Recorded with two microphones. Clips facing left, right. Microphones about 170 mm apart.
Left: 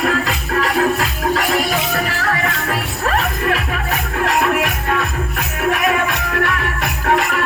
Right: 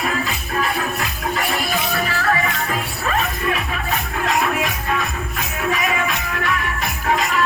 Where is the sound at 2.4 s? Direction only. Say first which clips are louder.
Left 2 dB; 65° left (ahead or behind).